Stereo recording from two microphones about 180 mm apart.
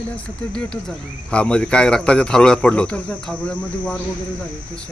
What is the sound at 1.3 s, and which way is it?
Speech, 5° left (ahead or behind).